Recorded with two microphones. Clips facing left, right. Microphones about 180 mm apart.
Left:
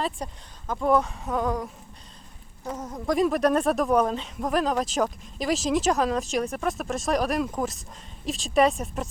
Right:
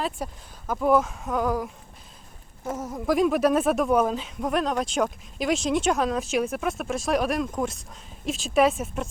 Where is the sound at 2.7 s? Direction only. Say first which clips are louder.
Right 2 dB; 5° right (ahead or behind).